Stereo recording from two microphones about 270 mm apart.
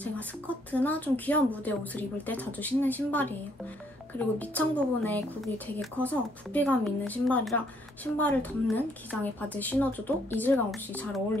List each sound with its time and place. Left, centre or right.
0.0 s a woman's voice: centre